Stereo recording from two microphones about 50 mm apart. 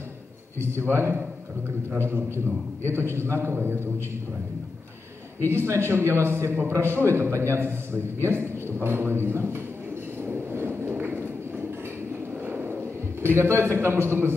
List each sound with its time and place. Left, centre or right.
0.6 s a man's voice: right
5.4 s a man's voice: right
10.2 s train: right
12.4 s a sound: right
13.2 s a man's voice: right